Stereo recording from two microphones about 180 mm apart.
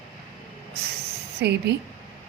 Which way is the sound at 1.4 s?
70° right (ahead or behind).